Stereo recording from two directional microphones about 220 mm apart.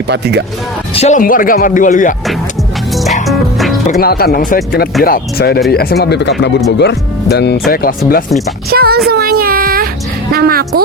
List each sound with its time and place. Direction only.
0.1 s a woman's voice: 50° right (ahead or behind)
0.9 s speech: 30° left (ahead or behind)
2.9 s music: centre (ahead or behind)
4.0 s speech: 45° left (ahead or behind)
8.7 s a woman's voice: 45° right (ahead or behind)
9.0 s a sound: 45° right (ahead or behind)
10.3 s a woman's voice: 45° right (ahead or behind)